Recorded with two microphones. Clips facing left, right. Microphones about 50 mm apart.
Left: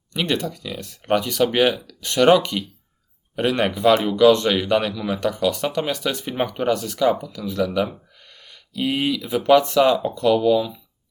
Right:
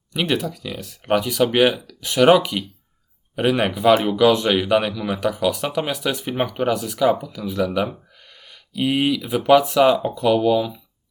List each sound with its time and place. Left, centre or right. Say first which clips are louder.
0.1 s speech: right 1 dB; centre